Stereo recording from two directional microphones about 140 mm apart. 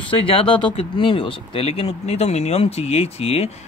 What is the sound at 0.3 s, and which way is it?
Speech, 40° left (ahead or behind).